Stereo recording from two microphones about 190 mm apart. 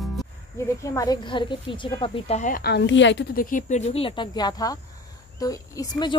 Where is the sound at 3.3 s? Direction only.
45° left (ahead or behind).